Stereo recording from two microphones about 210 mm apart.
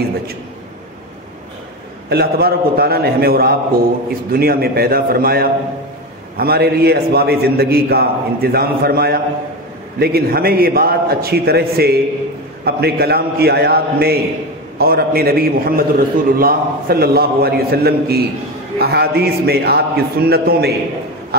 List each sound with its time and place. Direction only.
2.0 s a man's voice: 50° right (ahead or behind)